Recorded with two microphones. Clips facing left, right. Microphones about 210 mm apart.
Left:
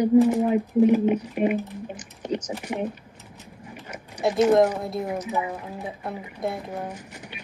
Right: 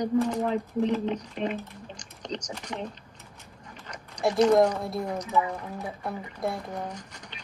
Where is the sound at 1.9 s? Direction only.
5° left (ahead or behind).